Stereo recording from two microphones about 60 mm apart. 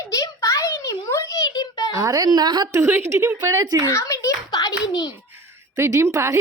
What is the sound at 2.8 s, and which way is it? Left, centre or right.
Speech, right.